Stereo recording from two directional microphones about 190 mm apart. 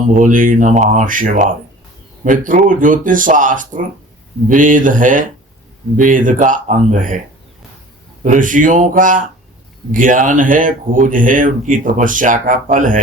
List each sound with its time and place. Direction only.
0.1 s speech: 45° right (ahead or behind)
8.2 s speech: 45° right (ahead or behind)